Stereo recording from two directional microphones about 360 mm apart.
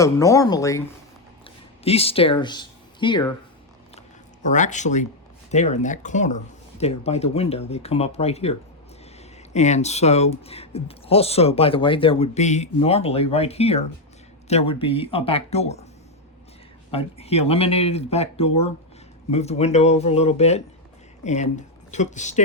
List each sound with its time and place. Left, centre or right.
0.0 s speech: centre
1.8 s speech: centre
4.4 s speech: centre
16.9 s speech: centre